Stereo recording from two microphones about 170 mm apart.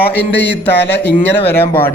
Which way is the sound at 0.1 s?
85° left.